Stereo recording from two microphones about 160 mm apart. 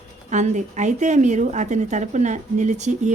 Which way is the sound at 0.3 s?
50° right (ahead or behind).